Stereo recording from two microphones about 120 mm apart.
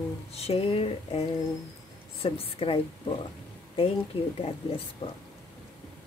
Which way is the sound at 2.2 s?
55° left (ahead or behind).